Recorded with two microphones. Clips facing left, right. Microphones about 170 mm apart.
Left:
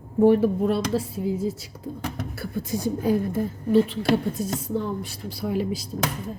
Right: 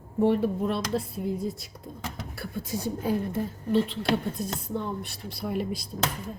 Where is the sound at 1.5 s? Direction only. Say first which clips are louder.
Left 6 dB; 70° left (ahead or behind).